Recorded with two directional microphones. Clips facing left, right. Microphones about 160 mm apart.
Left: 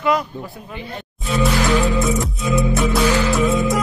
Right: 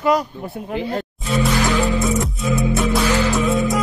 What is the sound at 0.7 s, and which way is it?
Speech, 90° right.